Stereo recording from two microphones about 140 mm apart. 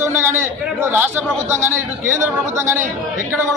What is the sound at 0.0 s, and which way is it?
A man's voice, 15° right (ahead or behind).